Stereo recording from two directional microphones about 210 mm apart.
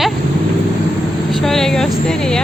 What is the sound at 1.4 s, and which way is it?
Speech, centre (ahead or behind).